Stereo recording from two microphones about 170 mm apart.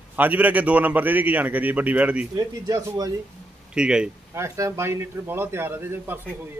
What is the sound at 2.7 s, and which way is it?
Speech, 20° right (ahead or behind).